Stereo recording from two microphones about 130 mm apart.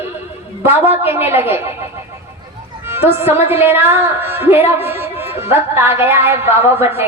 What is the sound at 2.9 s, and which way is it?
A woman's voice, 20° right (ahead or behind).